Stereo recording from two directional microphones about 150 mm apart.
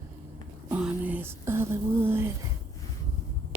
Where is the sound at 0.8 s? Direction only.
10° right (ahead or behind).